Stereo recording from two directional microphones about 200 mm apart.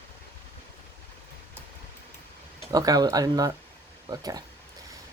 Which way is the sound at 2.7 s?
20° right (ahead or behind).